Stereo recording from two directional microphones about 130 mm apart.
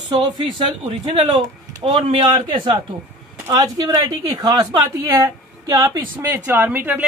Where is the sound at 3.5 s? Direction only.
30° right (ahead or behind).